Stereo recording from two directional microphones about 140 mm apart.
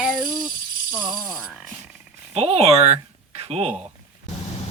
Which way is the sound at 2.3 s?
50° right (ahead or behind).